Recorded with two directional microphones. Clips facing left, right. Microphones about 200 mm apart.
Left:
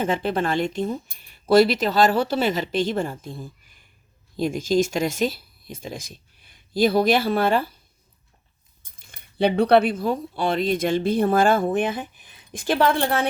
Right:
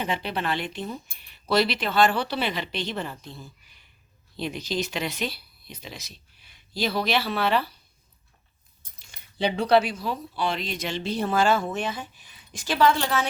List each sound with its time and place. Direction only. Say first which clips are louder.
0.0 s speech: left 6 dB; 45° left (ahead or behind)
9.0 s speech: left 6 dB; 55° left (ahead or behind)